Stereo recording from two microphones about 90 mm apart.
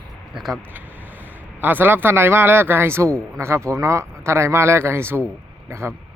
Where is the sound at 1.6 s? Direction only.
20° right (ahead or behind).